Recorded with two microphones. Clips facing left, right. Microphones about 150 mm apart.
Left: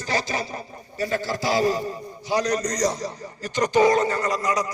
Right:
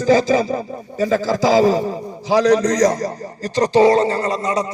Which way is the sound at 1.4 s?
90° right.